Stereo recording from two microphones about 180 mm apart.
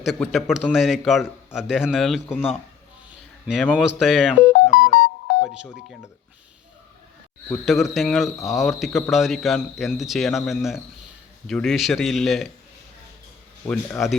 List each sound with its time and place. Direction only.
0.0 s a man's voice: centre (ahead or behind)
4.7 s music: 50° left (ahead or behind)
7.5 s a man's voice: centre (ahead or behind)
13.7 s a man's voice: 5° left (ahead or behind)